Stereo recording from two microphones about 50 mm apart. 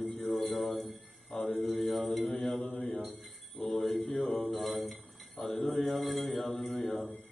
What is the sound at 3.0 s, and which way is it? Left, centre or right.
Jingle bell, centre.